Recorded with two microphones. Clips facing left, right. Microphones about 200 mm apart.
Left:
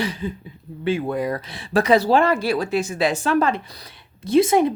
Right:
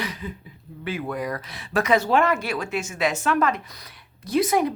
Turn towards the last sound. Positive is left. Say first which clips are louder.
# left 5 dB
turn(degrees=25)  # may be behind; listen again after turning